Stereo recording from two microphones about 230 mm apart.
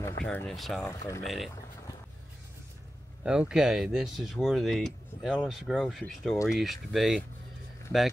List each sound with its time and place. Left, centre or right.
0.2 s speech: centre
0.8 s speech: centre
1.2 s speech: centre
3.3 s speech: centre